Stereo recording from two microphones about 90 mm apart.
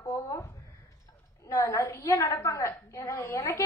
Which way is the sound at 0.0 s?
35° left (ahead or behind).